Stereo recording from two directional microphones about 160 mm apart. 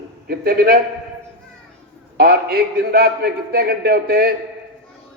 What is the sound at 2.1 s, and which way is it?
A man's voice, 70° right (ahead or behind).